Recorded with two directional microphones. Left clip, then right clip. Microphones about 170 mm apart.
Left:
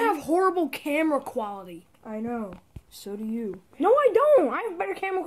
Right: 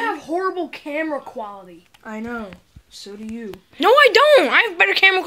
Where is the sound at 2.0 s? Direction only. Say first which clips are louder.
Right 3 dB; 45° right (ahead or behind).